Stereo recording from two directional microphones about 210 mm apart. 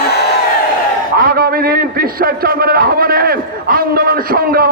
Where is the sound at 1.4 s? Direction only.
45° right (ahead or behind).